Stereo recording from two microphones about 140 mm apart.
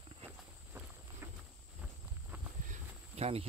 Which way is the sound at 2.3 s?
10° right (ahead or behind).